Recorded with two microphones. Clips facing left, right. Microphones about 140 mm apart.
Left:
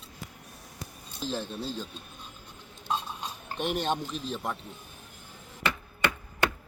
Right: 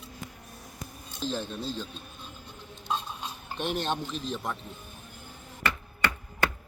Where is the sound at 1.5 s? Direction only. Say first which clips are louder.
Even; 10° left (ahead or behind).